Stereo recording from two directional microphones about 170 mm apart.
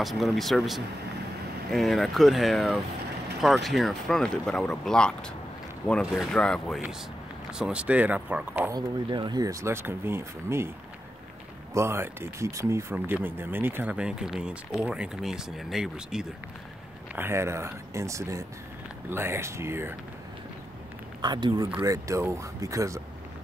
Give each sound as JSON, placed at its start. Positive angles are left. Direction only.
{"t": 0.0, "sound": "speech", "side_deg": 0}
{"t": 8.7, "sound": "speech", "side_deg": -25}
{"t": 11.7, "sound": "speech", "side_deg": -15}
{"t": 17.1, "sound": "speech", "side_deg": -15}
{"t": 21.2, "sound": "speech", "side_deg": -25}